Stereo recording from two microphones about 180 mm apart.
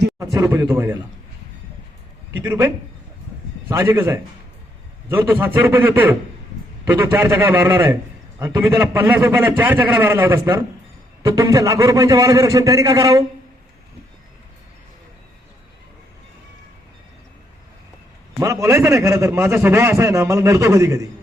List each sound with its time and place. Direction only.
0.2 s a man's voice: 15° right (ahead or behind)
2.3 s a man's voice: 15° right (ahead or behind)
18.3 s a man's voice: 15° right (ahead or behind)